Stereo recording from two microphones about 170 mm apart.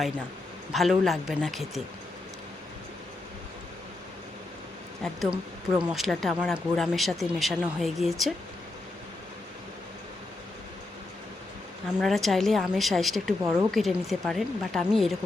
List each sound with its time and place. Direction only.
0.7 s speech: centre (ahead or behind)
5.3 s speech: 25° right (ahead or behind)
5.9 s speech: centre (ahead or behind)
11.9 s speech: centre (ahead or behind)